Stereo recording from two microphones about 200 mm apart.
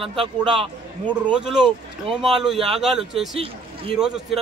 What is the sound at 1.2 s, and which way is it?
Speech, 5° right (ahead or behind).